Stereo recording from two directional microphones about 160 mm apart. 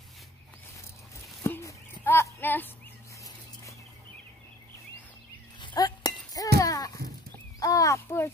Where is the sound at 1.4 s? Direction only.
20° left (ahead or behind).